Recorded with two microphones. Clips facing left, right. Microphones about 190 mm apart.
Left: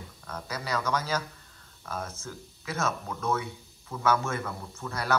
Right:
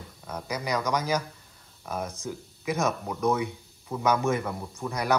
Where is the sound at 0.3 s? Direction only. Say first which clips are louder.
Right 3 dB; 10° right (ahead or behind).